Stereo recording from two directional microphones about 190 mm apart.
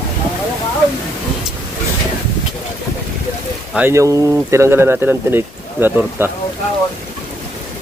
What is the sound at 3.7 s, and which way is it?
Speech, 15° right (ahead or behind).